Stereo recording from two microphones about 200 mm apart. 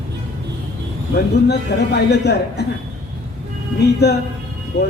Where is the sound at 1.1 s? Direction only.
55° left (ahead or behind).